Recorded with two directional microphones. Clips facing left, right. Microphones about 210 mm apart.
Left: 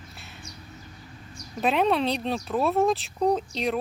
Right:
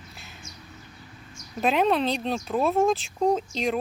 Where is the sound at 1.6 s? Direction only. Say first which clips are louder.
Right 1 dB; centre (ahead or behind).